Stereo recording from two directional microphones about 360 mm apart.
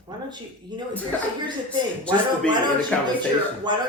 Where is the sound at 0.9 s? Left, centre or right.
Centre.